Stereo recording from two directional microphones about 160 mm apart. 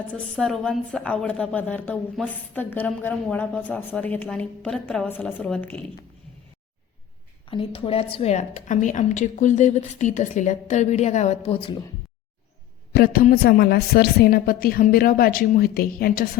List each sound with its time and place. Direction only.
0.1 s a woman's voice: 5° left (ahead or behind)
7.5 s a woman's voice: 35° left (ahead or behind)
12.9 s a man's voice: 75° left (ahead or behind)